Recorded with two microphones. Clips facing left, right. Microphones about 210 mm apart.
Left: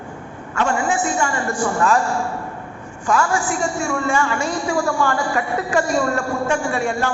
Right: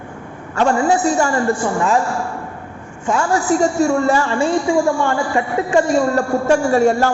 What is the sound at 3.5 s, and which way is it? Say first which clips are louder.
A woman's voice: right 7 dB; 40° right (ahead or behind).